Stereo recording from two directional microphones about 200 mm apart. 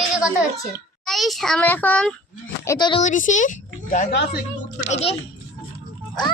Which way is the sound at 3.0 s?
40° left (ahead or behind).